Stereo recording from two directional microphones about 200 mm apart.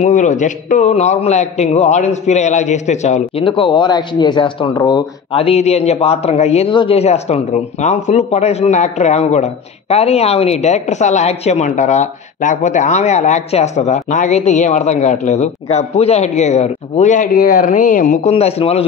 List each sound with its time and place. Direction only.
0.0 s a man's voice: 40° left (ahead or behind)